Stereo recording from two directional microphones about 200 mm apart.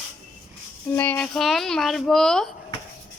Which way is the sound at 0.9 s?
10° left (ahead or behind).